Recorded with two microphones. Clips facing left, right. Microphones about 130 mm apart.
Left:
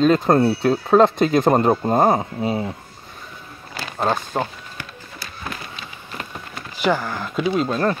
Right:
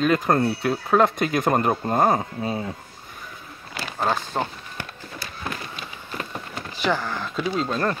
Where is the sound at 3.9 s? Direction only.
15° left (ahead or behind).